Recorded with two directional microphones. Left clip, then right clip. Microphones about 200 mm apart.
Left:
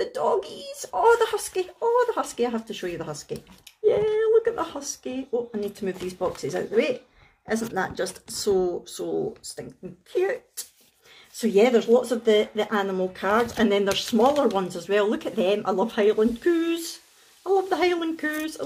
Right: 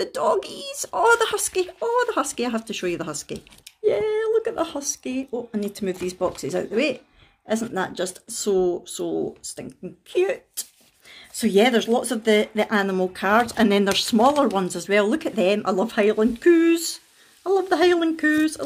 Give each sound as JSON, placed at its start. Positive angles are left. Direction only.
{"t": 0.0, "sound": "speech", "side_deg": -45}
{"t": 10.1, "sound": "speech", "side_deg": -45}